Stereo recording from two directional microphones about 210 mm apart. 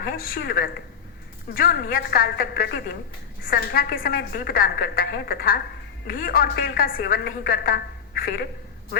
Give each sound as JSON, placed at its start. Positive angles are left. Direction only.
{"t": 0.0, "sound": "a woman's voice", "side_deg": 45}